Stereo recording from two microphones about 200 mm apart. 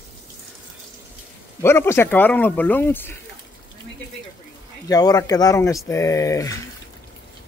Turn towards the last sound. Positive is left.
turn(degrees=15)  # may be behind; listen again after turning